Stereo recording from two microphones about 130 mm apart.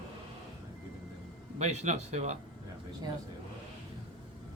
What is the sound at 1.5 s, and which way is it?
Speech, 60° right (ahead or behind).